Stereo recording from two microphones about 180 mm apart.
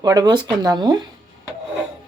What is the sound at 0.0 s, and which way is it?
Speech, 20° right (ahead or behind).